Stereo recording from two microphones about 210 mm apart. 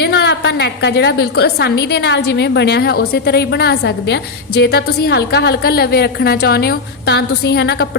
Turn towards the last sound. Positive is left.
turn(degrees=50)  # may be behind; listen again after turning